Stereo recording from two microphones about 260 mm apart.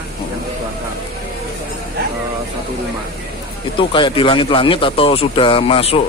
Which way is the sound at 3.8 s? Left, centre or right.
Centre.